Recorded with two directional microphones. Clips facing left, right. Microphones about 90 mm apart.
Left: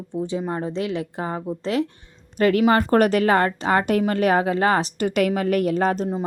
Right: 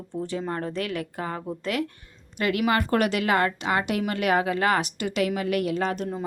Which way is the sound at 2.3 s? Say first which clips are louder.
Left 6 dB; 35° left (ahead or behind).